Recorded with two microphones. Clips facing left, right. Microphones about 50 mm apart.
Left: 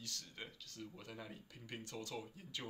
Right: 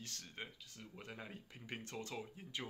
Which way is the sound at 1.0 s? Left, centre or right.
Right.